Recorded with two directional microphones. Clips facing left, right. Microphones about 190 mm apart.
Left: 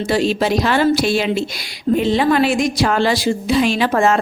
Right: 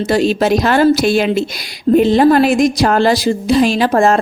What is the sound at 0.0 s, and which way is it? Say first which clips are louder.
A woman's voice: right 4 dB; 45° right (ahead or behind).